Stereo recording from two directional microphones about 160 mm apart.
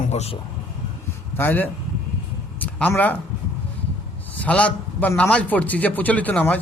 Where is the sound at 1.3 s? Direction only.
10° left (ahead or behind).